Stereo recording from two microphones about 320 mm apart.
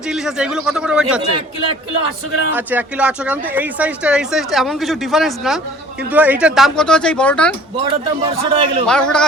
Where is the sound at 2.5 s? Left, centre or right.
Centre.